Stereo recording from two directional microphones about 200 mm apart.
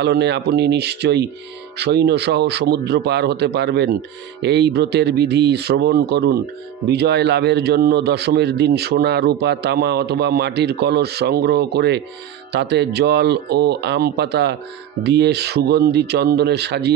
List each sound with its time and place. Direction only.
0.0 s a man's voice: 55° right (ahead or behind)